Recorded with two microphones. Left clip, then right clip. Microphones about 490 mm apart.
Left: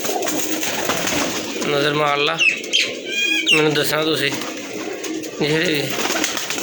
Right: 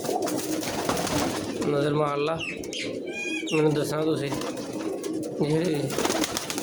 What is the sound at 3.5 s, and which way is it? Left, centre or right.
Speech, right.